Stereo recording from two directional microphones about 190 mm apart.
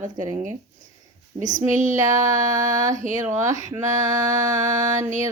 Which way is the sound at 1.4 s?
40° right (ahead or behind).